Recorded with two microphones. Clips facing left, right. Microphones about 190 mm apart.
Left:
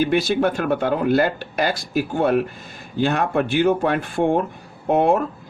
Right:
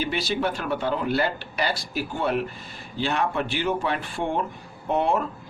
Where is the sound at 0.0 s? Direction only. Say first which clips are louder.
Left 7 dB; 50° left (ahead or behind).